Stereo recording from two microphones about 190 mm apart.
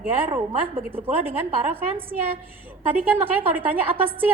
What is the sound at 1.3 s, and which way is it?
Speech, 10° right (ahead or behind).